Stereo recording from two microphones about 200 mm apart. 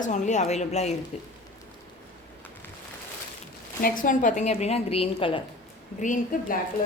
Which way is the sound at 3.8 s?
45° left (ahead or behind).